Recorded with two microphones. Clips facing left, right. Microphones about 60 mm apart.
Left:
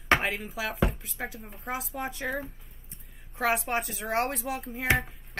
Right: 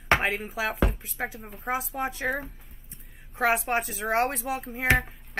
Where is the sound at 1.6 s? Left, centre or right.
Centre.